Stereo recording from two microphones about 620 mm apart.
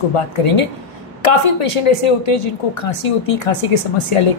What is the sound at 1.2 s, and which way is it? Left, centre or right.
A woman's voice, left.